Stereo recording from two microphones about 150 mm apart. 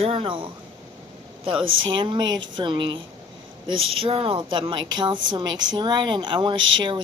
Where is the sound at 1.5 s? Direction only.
35° right (ahead or behind).